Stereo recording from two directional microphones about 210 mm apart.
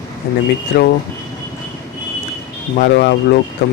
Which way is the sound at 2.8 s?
50° left (ahead or behind).